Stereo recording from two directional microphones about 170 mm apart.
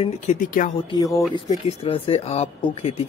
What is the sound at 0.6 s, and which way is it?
Speech, 50° left (ahead or behind).